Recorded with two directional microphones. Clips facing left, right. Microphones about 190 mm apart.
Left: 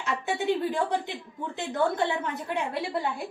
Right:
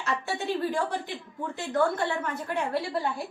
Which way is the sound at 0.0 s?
20° left (ahead or behind).